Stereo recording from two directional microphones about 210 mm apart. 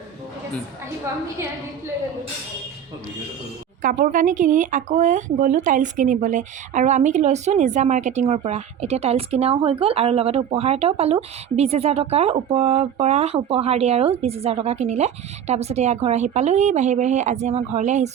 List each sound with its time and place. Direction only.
3.8 s speech: 40° right (ahead or behind)